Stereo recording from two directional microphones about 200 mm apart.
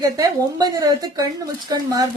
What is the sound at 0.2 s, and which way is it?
A woman's voice, 20° right (ahead or behind).